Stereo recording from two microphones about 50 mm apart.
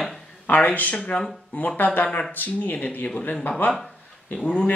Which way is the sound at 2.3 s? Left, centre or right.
Left.